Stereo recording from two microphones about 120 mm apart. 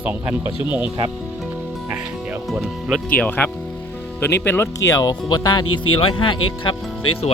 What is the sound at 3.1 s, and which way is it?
Speech, 15° left (ahead or behind).